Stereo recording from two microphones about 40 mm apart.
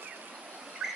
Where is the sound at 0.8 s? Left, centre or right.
Centre.